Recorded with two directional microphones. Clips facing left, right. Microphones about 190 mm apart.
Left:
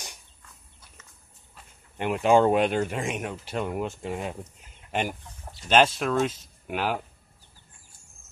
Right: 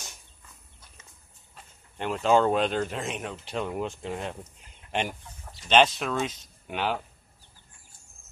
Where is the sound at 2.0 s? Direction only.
10° left (ahead or behind).